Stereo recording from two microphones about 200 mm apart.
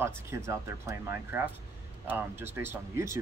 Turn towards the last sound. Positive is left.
turn(degrees=-15)  # may be behind; listen again after turning